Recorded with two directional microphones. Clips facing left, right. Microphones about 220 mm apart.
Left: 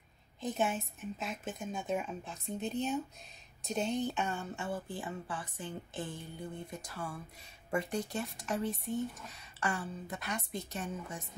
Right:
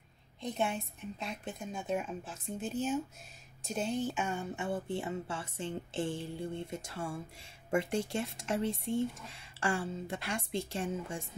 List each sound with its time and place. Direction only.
0.4 s a woman's voice: 5° left (ahead or behind); by 11.2 s 30° right (ahead or behind)